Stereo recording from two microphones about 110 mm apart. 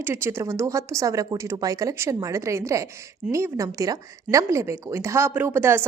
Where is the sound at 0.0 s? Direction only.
20° right (ahead or behind).